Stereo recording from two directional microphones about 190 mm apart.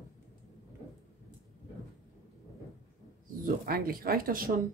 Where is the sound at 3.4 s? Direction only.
50° right (ahead or behind).